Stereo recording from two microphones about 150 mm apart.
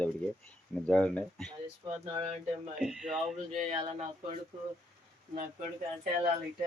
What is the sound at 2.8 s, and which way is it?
Speech, 5° right (ahead or behind).